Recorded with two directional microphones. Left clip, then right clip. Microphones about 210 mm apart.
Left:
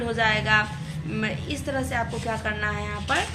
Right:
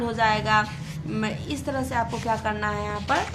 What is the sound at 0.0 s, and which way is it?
A woman's voice, 40° right (ahead or behind).